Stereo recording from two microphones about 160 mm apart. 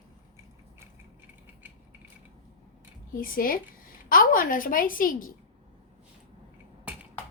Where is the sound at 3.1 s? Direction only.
60° left (ahead or behind).